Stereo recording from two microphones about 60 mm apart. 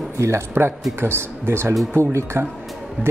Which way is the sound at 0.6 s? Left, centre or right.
Right.